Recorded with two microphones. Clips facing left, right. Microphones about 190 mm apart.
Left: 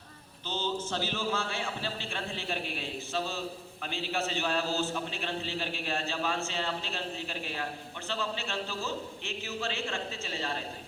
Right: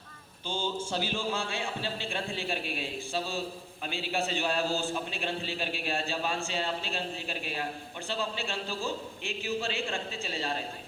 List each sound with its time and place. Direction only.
0.4 s a man's voice: 10° right (ahead or behind)